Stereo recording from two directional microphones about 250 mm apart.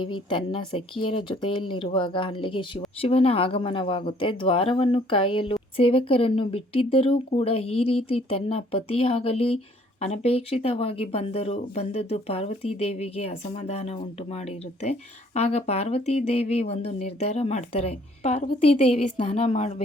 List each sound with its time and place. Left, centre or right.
0.0 s speech: centre